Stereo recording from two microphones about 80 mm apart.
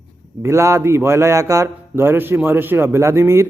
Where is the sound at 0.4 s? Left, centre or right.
Right.